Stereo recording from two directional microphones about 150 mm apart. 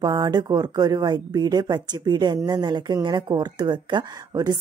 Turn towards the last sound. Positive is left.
turn(degrees=-25)  # may be behind; listen again after turning